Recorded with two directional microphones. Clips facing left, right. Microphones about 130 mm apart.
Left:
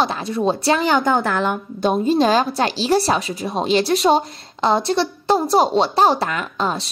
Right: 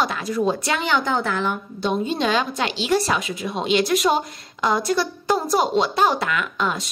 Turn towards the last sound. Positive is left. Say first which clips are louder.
# left 2 dB
turn(degrees=30)  # may be behind; listen again after turning